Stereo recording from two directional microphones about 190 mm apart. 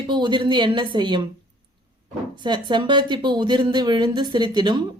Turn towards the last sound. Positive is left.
turn(degrees=-25)  # may be behind; listen again after turning